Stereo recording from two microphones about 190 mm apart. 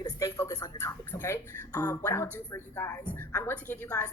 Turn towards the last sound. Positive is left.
turn(degrees=10)  # may be behind; listen again after turning